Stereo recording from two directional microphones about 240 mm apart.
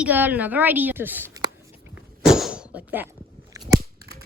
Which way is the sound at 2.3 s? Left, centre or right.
Centre.